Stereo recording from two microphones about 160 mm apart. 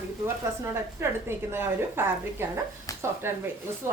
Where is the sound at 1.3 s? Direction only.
15° right (ahead or behind).